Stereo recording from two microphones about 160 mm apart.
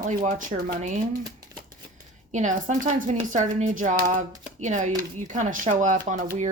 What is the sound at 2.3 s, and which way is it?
Speech, 55° right (ahead or behind).